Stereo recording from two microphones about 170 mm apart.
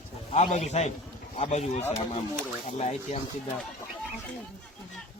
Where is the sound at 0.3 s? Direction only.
40° left (ahead or behind).